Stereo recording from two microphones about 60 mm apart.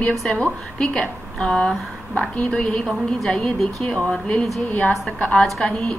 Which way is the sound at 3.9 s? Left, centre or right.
Centre.